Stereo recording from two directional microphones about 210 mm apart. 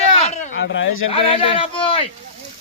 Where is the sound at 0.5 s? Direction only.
65° left (ahead or behind).